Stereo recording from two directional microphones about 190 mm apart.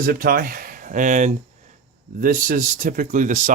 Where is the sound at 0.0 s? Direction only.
50° right (ahead or behind).